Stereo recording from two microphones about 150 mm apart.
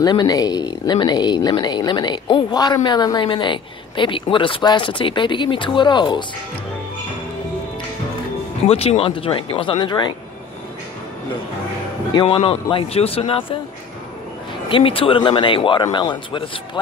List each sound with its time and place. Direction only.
0.0 s speech: 30° left (ahead or behind)
8.6 s speech: 40° left (ahead or behind)
12.1 s speech: 35° left (ahead or behind)
14.7 s speech: 35° left (ahead or behind)